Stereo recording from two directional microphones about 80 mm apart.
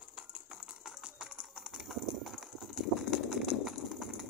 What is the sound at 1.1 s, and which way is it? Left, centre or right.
Horse, centre.